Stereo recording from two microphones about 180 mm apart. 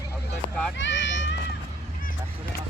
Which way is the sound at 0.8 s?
90° left.